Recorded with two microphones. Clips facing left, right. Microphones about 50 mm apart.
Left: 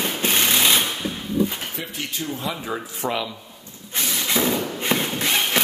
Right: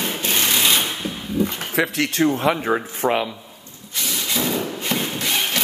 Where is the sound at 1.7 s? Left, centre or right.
Right.